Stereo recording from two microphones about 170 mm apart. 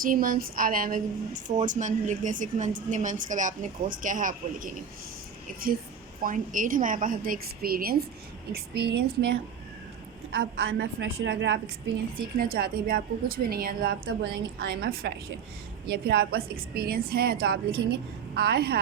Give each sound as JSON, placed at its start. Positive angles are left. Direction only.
{"t": 0.0, "sound": "speech", "side_deg": -55}
{"t": 6.2, "sound": "speech", "side_deg": -50}
{"t": 8.5, "sound": "a woman's voice", "side_deg": -70}
{"t": 12.1, "sound": "a woman's voice", "side_deg": -60}